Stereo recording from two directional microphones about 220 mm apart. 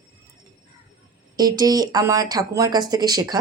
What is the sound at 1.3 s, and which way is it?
A woman's voice, 15° right (ahead or behind).